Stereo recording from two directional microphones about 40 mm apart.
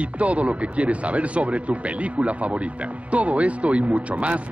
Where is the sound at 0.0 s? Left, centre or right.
Right.